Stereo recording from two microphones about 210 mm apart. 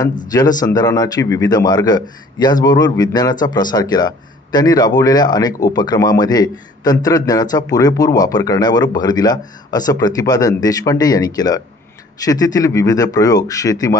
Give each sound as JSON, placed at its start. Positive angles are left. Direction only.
{"t": 0.3, "sound": "a man's voice", "side_deg": 20}